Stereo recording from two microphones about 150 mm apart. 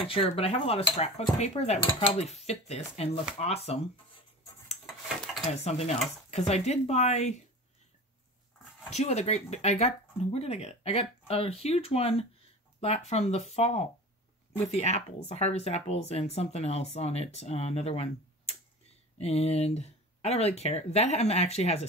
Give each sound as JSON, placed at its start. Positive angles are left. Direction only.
{"t": 0.0, "sound": "cutlery", "side_deg": 40}
{"t": 1.4, "sound": "speech", "side_deg": 45}
{"t": 5.5, "sound": "speech", "side_deg": 45}
{"t": 8.9, "sound": "speech", "side_deg": 45}